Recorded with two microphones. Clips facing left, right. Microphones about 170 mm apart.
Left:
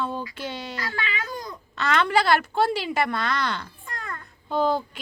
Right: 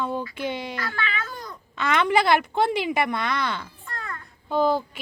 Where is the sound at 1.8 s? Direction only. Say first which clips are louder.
Right 1 dB; 10° right (ahead or behind).